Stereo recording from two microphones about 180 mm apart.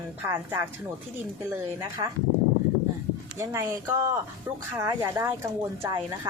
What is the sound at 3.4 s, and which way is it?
Speech, 15° right (ahead or behind).